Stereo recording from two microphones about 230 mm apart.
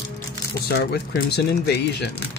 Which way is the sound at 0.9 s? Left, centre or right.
Left.